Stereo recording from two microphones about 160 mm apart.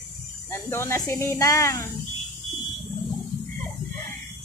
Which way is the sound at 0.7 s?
15° left (ahead or behind).